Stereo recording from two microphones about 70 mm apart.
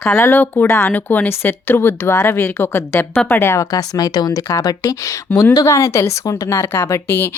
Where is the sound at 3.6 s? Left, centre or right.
Left.